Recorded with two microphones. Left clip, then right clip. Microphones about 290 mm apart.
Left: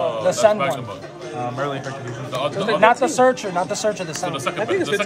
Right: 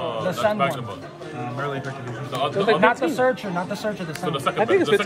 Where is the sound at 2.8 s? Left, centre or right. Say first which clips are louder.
Left 4 dB; left.